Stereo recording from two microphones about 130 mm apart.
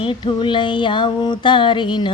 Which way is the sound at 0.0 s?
40° left (ahead or behind).